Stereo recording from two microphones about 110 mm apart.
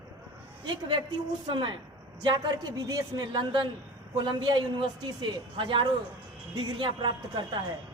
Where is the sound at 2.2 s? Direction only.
35° right (ahead or behind).